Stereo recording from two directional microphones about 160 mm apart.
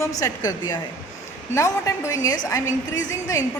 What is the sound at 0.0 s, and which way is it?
A woman's voice, 20° left (ahead or behind).